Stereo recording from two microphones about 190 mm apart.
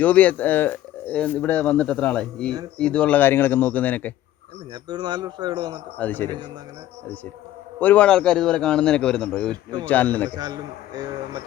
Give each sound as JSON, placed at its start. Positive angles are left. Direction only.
{"t": 0.0, "sound": "speech", "side_deg": 10}
{"t": 4.7, "sound": "a man's voice", "side_deg": -20}
{"t": 6.0, "sound": "speech", "side_deg": 10}
{"t": 7.8, "sound": "a man's voice", "side_deg": 10}
{"t": 10.3, "sound": "a man's voice", "side_deg": -20}